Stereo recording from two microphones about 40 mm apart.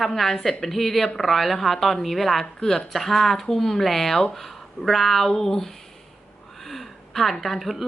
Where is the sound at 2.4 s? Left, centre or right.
Centre.